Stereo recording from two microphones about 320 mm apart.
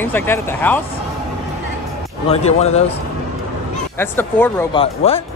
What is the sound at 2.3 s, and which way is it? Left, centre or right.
Speech, centre.